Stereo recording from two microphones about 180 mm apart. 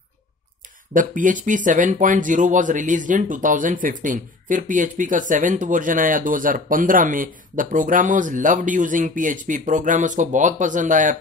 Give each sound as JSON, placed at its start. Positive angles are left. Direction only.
{"t": 0.9, "sound": "speech", "side_deg": -45}